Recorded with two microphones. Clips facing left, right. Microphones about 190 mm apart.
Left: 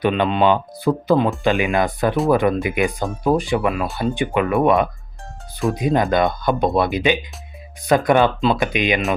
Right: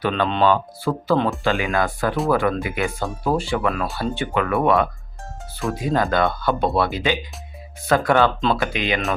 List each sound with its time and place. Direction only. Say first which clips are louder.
0.0 s speech: left 2 dB; 15° left (ahead or behind)